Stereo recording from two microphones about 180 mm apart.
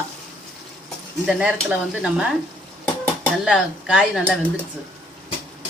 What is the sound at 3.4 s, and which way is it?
Speech, 5° right (ahead or behind).